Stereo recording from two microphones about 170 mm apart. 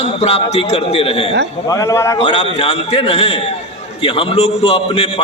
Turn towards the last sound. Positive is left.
turn(degrees=35)  # may be behind; listen again after turning